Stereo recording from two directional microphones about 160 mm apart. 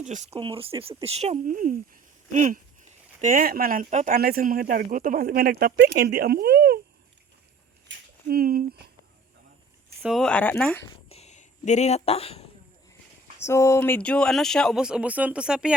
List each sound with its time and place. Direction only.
0.0 s speech: 45° right (ahead or behind)
0.3 s speech: 35° right (ahead or behind); by 6.7 s 90° right
8.3 s speech: 65° right (ahead or behind)
10.0 s speech: centre (ahead or behind)
11.1 s a sound: 45° left (ahead or behind)
13.4 s speech: 20° left (ahead or behind); by 15.7 s 5° right (ahead or behind)